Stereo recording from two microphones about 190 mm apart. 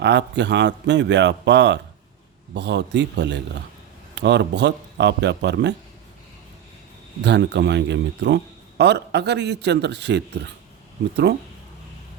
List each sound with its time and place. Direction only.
0.0 s a man's voice: 65° right (ahead or behind)
7.2 s a man's voice: 65° right (ahead or behind)